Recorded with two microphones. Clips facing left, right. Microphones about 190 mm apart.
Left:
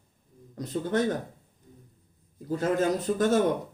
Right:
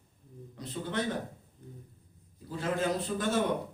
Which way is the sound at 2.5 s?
45° left (ahead or behind).